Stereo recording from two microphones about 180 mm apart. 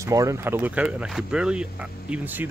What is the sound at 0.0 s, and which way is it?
Speech, 20° right (ahead or behind).